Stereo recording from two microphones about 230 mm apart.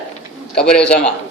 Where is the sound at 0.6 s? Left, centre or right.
Centre.